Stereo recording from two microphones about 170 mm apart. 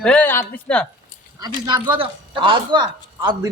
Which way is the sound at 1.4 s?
25° right (ahead or behind).